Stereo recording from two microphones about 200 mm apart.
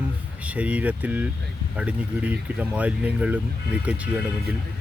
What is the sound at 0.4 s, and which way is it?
Speech, 5° right (ahead or behind).